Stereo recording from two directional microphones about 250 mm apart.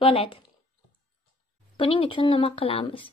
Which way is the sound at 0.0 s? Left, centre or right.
Left.